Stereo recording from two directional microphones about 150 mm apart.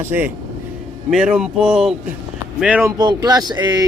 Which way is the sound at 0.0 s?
15° right (ahead or behind).